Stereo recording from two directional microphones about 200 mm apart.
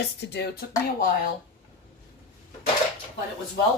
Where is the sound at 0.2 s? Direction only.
55° left (ahead or behind).